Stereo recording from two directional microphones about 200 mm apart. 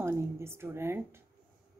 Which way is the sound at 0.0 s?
10° right (ahead or behind).